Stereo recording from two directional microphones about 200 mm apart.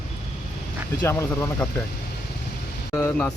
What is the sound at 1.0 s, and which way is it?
Speech, 10° left (ahead or behind).